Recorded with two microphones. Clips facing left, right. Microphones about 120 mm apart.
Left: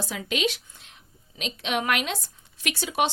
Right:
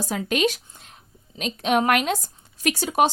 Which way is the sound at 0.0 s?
45° right (ahead or behind).